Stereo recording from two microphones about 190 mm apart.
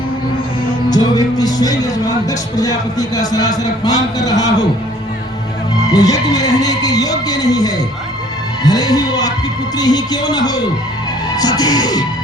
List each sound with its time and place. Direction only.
0.9 s a man's voice: 20° left (ahead or behind)
5.8 s a man's voice: 20° left (ahead or behind)